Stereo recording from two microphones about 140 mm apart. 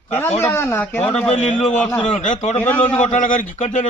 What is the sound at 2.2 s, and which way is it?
Speech, 60° left (ahead or behind).